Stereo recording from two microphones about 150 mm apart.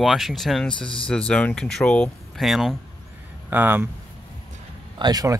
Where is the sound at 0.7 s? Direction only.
35° left (ahead or behind).